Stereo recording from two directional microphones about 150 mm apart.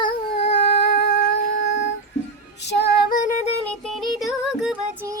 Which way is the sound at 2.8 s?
90° left.